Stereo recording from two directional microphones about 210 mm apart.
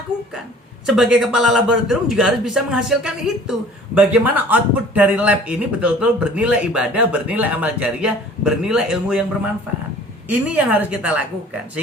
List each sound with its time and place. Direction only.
0.9 s a man's voice: centre (ahead or behind)
10.2 s speech: 5° right (ahead or behind)